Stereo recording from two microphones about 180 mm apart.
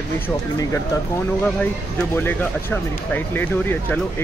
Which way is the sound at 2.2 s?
10° left (ahead or behind).